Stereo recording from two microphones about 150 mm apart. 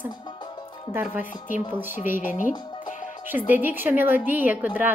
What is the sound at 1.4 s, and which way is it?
Speech, 60° left (ahead or behind).